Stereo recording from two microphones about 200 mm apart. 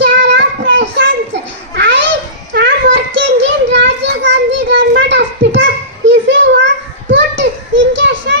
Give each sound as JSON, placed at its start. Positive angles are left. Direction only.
{"t": 0.0, "sound": "child singing", "side_deg": -60}
{"t": 1.7, "sound": "children playing", "side_deg": -65}
{"t": 2.5, "sound": "a sound", "side_deg": -65}